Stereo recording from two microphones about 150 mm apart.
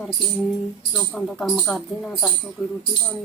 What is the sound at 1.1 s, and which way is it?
Speech, 5° left (ahead or behind).